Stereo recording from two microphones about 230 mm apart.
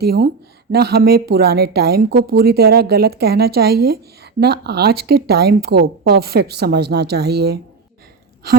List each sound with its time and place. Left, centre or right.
0.0 s a woman's voice: right